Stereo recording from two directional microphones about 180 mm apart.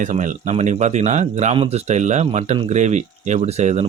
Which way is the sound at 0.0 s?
45° right (ahead or behind).